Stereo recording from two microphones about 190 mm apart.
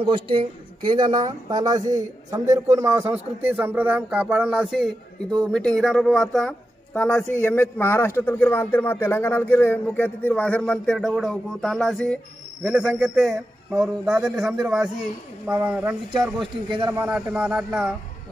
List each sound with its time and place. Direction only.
0.0 s a man's voice: 25° right (ahead or behind); by 17.8 s 5° right (ahead or behind)